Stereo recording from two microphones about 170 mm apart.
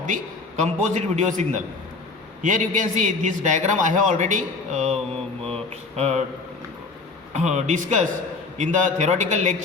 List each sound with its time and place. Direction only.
0.6 s a man's voice: 45° right (ahead or behind)
6.0 s a man's voice: 40° right (ahead or behind)
7.3 s a man's voice: 45° right (ahead or behind)